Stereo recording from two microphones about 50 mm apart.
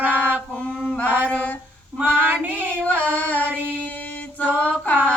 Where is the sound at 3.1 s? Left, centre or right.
Left.